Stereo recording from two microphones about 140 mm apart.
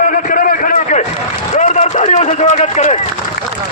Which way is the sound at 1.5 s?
60° left (ahead or behind).